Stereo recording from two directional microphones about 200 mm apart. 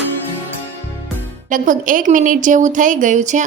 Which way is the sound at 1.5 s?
40° right (ahead or behind).